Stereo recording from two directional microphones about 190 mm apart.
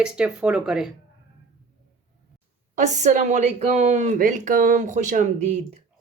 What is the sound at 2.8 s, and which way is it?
A woman's voice, 40° right (ahead or behind).